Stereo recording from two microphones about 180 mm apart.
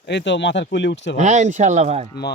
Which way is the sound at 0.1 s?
75° left (ahead or behind).